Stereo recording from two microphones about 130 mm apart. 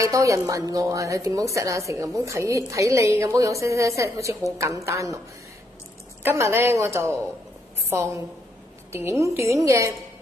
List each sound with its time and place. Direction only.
0.0 s a woman's voice: 25° right (ahead or behind)
6.2 s a woman's voice: 20° right (ahead or behind)
8.9 s a woman's voice: 20° right (ahead or behind)